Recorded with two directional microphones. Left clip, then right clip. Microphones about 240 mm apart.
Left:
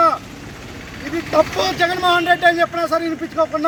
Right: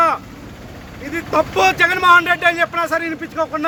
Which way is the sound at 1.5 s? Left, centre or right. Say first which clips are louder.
Right 4 dB; right.